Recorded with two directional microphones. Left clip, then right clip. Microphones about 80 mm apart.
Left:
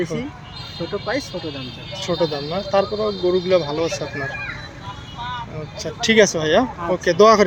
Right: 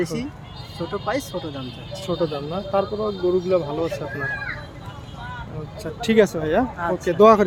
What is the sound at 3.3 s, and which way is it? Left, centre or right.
Speech, centre.